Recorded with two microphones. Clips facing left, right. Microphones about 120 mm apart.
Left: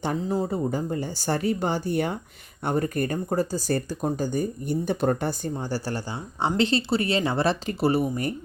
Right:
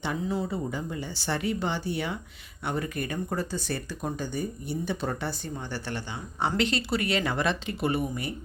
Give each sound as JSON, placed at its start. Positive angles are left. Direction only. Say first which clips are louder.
{"t": 0.0, "sound": "speech", "louder": "left 4 dB", "side_deg": 40}